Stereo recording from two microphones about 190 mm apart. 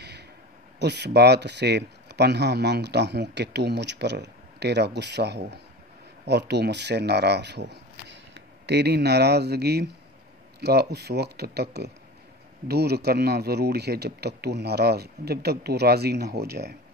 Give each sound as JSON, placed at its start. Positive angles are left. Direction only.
{"t": 0.7, "sound": "speech", "side_deg": -60}